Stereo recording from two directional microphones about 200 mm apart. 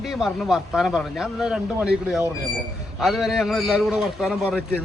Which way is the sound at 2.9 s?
Centre (ahead or behind).